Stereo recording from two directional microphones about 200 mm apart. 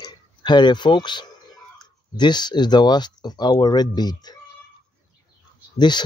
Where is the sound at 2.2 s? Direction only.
20° left (ahead or behind).